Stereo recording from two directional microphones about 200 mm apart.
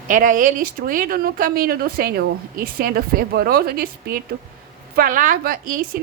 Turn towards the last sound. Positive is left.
turn(degrees=-45)  # may be behind; listen again after turning